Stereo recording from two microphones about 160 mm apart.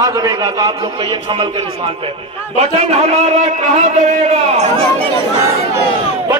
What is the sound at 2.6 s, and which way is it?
A man's voice, 40° right (ahead or behind).